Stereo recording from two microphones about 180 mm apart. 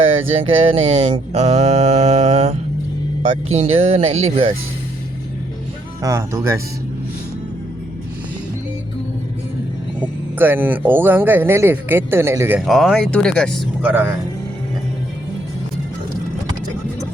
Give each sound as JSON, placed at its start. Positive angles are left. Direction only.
{"t": 0.4, "sound": "mantra", "side_deg": -30}
{"t": 6.0, "sound": "speech", "side_deg": -15}
{"t": 10.3, "sound": "speech", "side_deg": -10}